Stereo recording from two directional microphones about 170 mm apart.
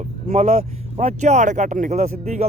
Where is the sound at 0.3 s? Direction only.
50° right (ahead or behind).